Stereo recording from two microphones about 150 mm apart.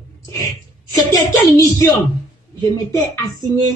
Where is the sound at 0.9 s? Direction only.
20° left (ahead or behind).